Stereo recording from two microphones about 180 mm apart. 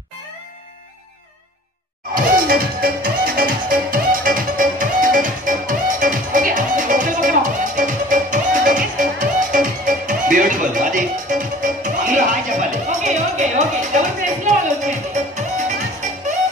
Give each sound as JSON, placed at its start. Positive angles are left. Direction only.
{"t": 2.1, "sound": "music", "side_deg": -50}